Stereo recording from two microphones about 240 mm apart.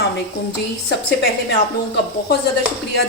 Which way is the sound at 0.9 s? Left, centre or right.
Left.